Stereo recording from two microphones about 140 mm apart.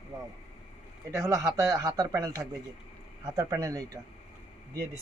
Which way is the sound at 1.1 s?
20° right (ahead or behind).